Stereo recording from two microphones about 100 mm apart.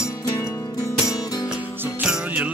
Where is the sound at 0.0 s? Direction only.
30° left (ahead or behind).